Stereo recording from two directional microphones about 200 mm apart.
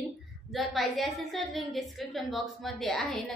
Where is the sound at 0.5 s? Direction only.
Centre (ahead or behind).